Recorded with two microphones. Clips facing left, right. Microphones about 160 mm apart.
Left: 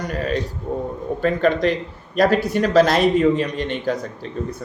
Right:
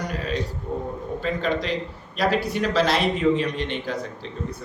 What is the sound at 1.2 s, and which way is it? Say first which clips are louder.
Speech: left 8 dB; 55° left (ahead or behind).